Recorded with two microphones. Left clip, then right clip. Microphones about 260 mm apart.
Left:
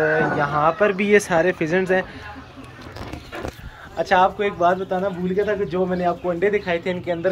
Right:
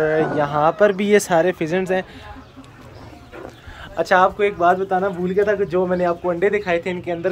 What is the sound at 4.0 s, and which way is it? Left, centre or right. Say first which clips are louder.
Speech: right 2 dB; centre.